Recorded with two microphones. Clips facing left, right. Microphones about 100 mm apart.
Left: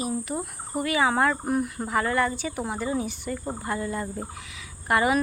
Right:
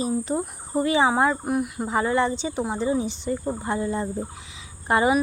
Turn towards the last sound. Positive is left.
turn(degrees=-25)  # may be behind; listen again after turning